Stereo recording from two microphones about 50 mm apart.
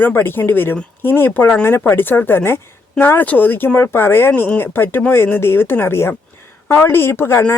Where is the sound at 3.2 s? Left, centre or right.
Left.